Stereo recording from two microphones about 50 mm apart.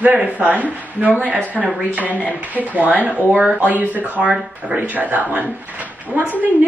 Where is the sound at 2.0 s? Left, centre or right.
Left.